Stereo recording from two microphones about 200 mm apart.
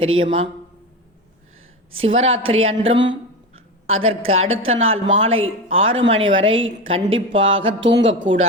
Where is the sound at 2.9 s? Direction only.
65° right (ahead or behind); by 4.0 s 90° right.